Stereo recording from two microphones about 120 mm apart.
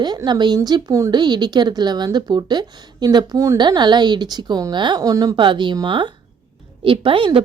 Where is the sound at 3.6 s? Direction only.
40° right (ahead or behind).